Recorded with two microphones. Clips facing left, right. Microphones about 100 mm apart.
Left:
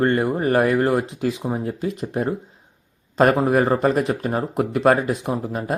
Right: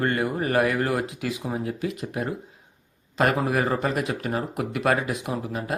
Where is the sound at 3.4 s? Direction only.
30° left (ahead or behind).